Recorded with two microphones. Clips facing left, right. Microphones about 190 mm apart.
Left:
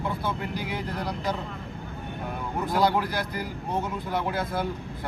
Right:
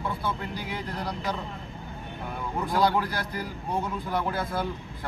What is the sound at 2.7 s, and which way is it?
A man's voice, 20° left (ahead or behind).